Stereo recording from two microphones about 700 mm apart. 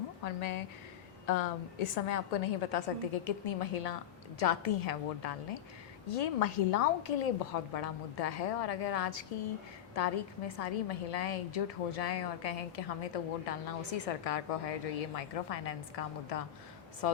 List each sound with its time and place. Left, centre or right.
0.3 s a woman's voice: left